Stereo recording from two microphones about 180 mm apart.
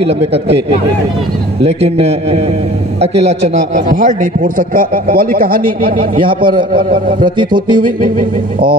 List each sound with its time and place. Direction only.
0.0 s a man's voice: 35° right (ahead or behind)
1.6 s a man's voice: 35° right (ahead or behind); by 5.9 s 55° right (ahead or behind)
6.2 s a man's voice: 25° right (ahead or behind)
6.8 s a man's voice: 55° right (ahead or behind)
7.3 s a man's voice: 25° right (ahead or behind)